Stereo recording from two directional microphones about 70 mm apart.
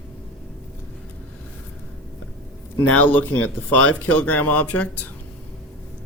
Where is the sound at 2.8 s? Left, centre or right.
Left.